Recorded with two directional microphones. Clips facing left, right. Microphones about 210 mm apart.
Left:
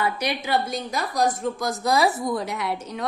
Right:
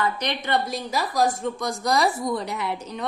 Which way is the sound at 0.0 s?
10° left (ahead or behind).